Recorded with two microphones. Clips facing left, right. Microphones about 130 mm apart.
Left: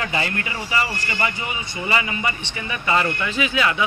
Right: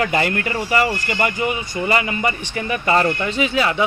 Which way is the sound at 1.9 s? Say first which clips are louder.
Right 3 dB; 45° right (ahead or behind).